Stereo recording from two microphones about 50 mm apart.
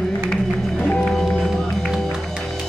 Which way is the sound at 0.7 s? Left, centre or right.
Left.